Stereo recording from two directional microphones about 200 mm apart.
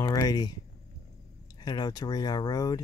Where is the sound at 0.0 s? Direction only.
20° left (ahead or behind).